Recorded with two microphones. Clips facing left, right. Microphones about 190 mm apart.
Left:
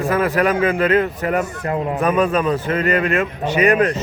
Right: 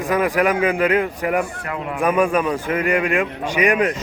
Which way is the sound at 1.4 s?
40° left (ahead or behind).